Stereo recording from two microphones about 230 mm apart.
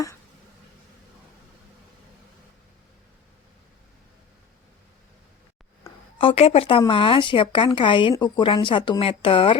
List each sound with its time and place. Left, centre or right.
6.1 s speech: left